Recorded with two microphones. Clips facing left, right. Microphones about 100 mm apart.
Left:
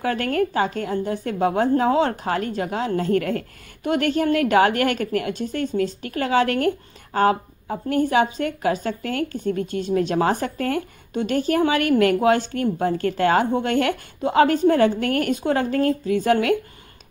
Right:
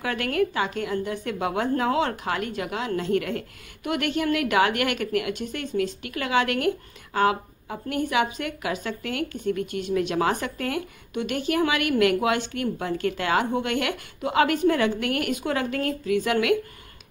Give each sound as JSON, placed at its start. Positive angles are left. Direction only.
{"t": 0.0, "sound": "a woman's voice", "side_deg": 40}